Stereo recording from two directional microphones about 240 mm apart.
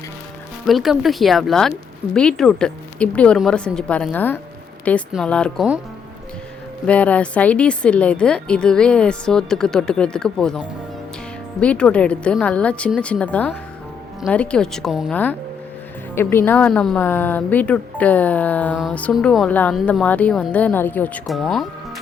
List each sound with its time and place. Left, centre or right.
0.7 s speech: centre
6.8 s speech: centre